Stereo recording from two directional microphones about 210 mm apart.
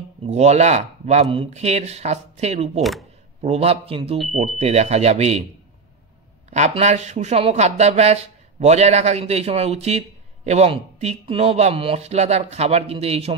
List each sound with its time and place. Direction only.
0.3 s speech: 30° right (ahead or behind)
2.8 s speech: centre (ahead or behind)
3.4 s a man's voice: 30° right (ahead or behind)
6.5 s speech: 35° right (ahead or behind)